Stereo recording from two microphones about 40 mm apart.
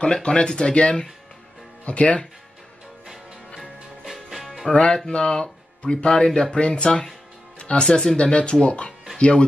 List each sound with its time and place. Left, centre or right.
0.0 s speech: left
4.1 s music: centre
4.6 s speech: left